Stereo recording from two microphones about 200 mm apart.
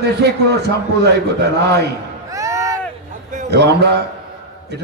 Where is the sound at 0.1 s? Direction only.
55° right (ahead or behind).